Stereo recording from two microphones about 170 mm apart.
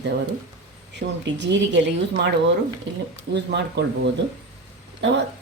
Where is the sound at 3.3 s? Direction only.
85° right.